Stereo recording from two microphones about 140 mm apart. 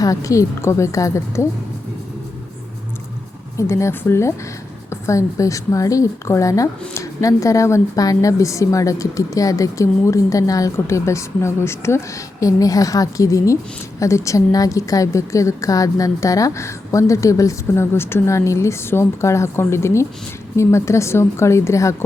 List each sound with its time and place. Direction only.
0.0 s a woman's voice: 25° left (ahead or behind)
3.6 s a woman's voice: 20° left (ahead or behind)